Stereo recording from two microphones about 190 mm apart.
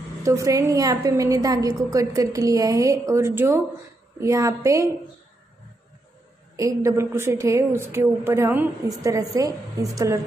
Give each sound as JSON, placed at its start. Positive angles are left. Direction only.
{"t": 0.2, "sound": "a woman's voice", "side_deg": -15}
{"t": 6.5, "sound": "a woman's voice", "side_deg": -15}